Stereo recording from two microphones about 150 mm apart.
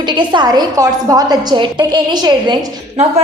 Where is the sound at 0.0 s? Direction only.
30° right (ahead or behind).